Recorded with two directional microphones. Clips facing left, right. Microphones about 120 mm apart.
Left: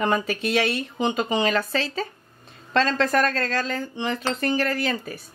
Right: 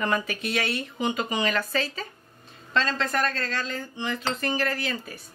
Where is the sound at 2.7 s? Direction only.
45° left (ahead or behind).